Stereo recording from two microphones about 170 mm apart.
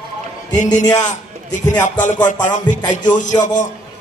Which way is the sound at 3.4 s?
45° left (ahead or behind).